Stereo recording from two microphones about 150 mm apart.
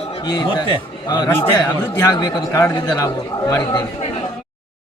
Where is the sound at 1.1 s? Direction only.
30° left (ahead or behind).